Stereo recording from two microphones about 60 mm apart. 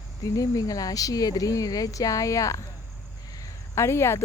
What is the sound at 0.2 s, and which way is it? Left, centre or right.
Speech, left.